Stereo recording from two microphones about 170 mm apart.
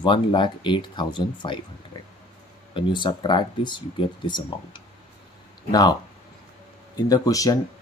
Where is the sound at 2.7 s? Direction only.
25° left (ahead or behind).